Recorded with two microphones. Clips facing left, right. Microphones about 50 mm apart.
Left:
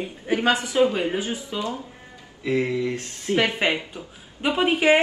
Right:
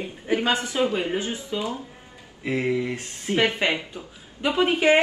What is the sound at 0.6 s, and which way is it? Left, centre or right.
Speech, right.